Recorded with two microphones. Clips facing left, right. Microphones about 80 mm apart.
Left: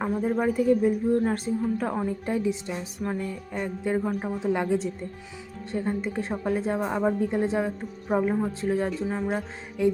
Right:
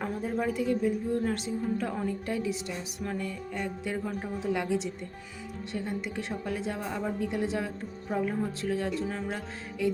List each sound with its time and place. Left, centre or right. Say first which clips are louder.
0.0 s speech: left 6 dB; left
2.0 s speech: left 4 dB; left